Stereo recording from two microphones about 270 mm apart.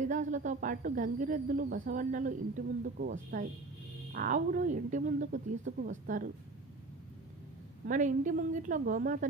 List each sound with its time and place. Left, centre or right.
0.0 s speech: right
7.8 s speech: right